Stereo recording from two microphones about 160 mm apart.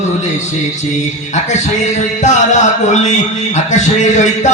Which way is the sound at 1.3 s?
50° left (ahead or behind).